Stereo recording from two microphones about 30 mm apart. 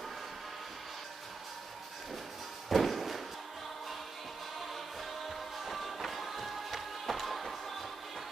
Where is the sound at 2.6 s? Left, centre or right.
Centre.